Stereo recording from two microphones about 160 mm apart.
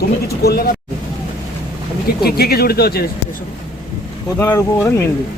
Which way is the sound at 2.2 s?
80° left.